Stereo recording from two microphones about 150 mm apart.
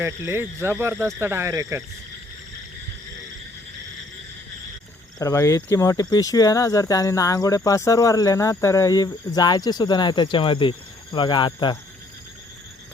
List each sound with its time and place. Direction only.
0.0 s speech: 15° right (ahead or behind)
5.2 s speech: 20° left (ahead or behind)